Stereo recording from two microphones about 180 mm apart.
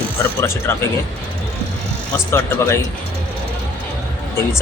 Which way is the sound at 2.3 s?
15° left (ahead or behind).